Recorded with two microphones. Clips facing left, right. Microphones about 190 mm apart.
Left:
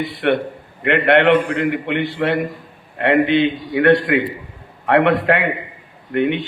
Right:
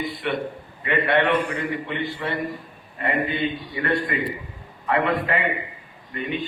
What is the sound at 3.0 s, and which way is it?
A man's voice, 85° left.